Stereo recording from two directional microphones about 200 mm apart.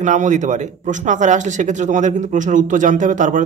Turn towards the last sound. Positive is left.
turn(degrees=-40)  # may be behind; listen again after turning